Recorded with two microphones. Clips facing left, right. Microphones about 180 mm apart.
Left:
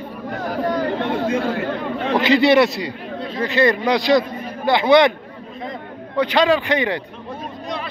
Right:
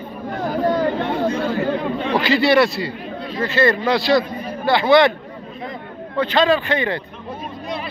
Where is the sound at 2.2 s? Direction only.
20° left (ahead or behind).